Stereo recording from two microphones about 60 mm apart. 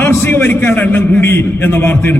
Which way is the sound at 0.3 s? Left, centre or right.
Left.